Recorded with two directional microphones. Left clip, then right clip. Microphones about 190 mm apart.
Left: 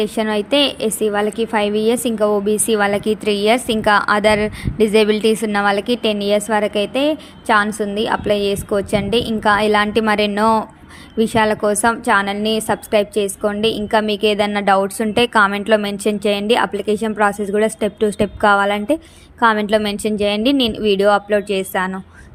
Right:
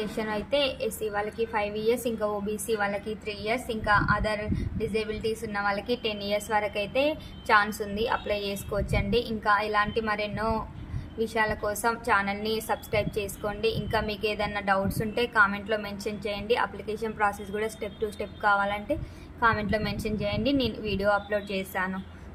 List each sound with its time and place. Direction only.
0.0 s a woman's voice: 45° left (ahead or behind)